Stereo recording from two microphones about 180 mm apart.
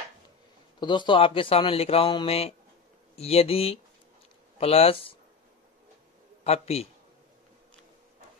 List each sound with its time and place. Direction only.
0.7 s speech: 25° left (ahead or behind)
6.4 s speech: 35° left (ahead or behind)